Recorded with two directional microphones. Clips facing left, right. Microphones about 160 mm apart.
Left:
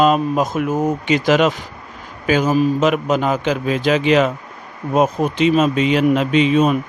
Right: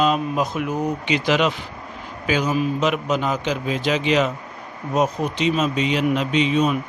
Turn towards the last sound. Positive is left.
turn(degrees=50)  # may be behind; listen again after turning